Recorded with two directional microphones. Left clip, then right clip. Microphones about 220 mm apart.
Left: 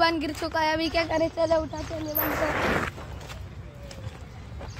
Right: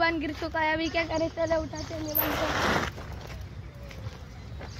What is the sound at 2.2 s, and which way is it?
Speech, 30° right (ahead or behind).